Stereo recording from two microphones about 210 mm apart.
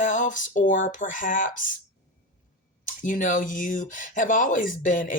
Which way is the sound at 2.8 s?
40° left (ahead or behind).